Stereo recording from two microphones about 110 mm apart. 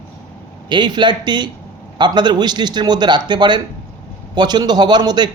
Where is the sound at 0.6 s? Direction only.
45° right (ahead or behind).